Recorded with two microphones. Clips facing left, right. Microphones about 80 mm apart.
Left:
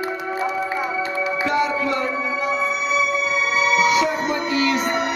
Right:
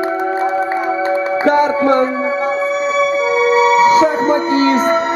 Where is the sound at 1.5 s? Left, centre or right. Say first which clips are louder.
Right 10 dB; right.